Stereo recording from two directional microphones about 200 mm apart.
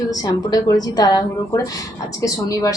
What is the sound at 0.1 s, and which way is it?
Speech, 20° left (ahead or behind).